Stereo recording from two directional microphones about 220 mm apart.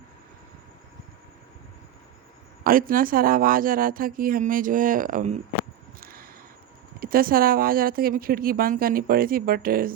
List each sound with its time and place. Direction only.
2.6 s speech: 40° right (ahead or behind)
6.0 s a sound: 40° right (ahead or behind)
7.0 s speech: 40° right (ahead or behind)